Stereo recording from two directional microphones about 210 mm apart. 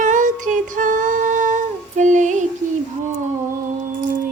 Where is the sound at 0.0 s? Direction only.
40° right (ahead or behind).